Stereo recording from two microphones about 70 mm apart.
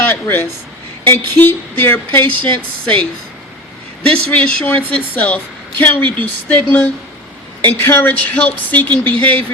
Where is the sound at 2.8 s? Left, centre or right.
Centre.